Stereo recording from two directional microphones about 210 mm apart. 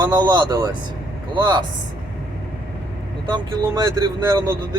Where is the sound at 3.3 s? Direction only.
20° right (ahead or behind).